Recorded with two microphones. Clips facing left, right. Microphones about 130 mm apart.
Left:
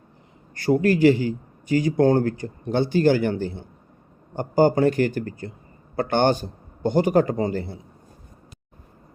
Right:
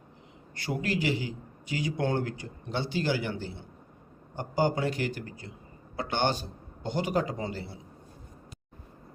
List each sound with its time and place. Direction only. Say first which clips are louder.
0.5 s a man's voice: left 12 dB; 45° left (ahead or behind)